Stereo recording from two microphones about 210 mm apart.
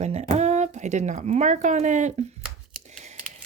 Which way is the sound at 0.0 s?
30° right (ahead or behind).